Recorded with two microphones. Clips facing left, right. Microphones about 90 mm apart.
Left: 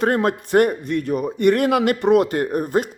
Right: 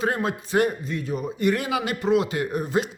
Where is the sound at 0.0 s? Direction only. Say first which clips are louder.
Left 6 dB; 60° left (ahead or behind).